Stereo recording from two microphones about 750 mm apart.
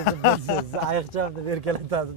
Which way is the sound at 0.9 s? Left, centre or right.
Right.